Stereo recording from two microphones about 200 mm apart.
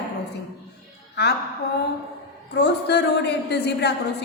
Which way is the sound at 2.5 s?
55° left (ahead or behind).